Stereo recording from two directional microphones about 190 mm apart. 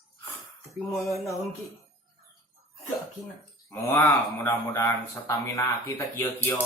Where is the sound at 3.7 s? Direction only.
10° left (ahead or behind).